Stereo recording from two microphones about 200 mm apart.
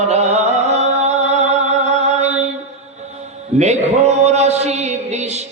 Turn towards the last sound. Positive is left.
turn(degrees=-35)  # may be behind; listen again after turning